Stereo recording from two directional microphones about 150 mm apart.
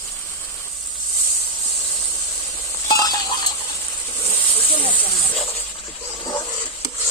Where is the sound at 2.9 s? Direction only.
25° left (ahead or behind).